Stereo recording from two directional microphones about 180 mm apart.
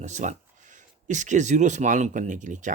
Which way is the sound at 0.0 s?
40° right (ahead or behind).